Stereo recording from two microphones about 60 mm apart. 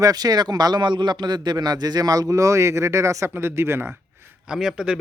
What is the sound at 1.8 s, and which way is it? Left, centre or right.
A man's voice, right.